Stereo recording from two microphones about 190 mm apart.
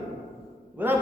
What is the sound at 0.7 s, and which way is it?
Speech, 10° right (ahead or behind).